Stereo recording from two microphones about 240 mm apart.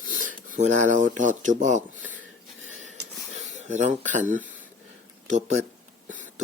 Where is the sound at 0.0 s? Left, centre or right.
Right.